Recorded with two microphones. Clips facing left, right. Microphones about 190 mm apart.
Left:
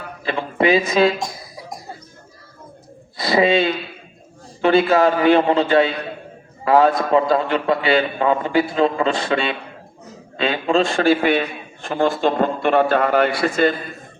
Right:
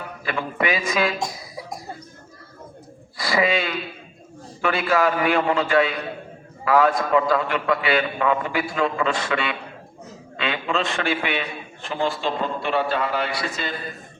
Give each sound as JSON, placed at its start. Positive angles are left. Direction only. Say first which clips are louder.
{"t": 0.3, "sound": "a man's voice", "louder": "left 7 dB", "side_deg": 25}
{"t": 3.2, "sound": "a man's voice", "louder": "left 6 dB", "side_deg": 25}